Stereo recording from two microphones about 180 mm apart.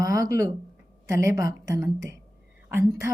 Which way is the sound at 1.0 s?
15° right (ahead or behind).